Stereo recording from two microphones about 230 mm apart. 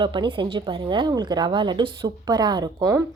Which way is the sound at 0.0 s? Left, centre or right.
Right.